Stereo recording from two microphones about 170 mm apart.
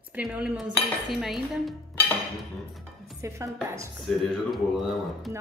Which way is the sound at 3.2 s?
20° right (ahead or behind).